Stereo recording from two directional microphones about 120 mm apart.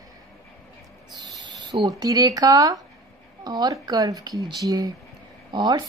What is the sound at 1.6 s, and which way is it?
Speech, 40° right (ahead or behind).